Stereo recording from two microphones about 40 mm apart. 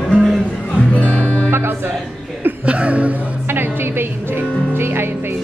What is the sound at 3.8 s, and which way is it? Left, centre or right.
Speech, right.